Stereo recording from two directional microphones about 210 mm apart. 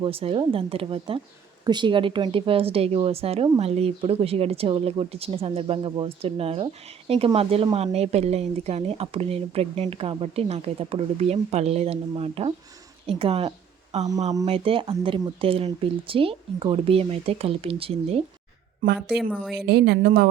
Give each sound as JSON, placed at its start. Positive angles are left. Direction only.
{"t": 0.0, "sound": "a woman's voice", "side_deg": -25}
{"t": 18.9, "sound": "a woman's voice", "side_deg": 0}
{"t": 19.6, "sound": "speech", "side_deg": -50}